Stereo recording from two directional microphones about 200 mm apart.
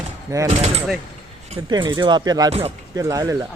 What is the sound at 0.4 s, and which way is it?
Speech, 35° right (ahead or behind).